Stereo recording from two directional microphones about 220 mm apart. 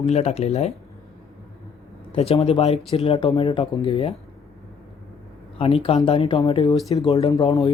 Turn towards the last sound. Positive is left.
turn(degrees=20)  # may be behind; listen again after turning